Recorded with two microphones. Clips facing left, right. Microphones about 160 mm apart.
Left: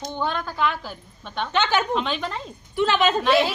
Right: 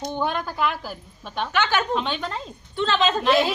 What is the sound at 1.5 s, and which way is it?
Speech, 20° left (ahead or behind).